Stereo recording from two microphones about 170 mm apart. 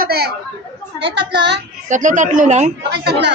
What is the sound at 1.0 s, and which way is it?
Speech, 85° right.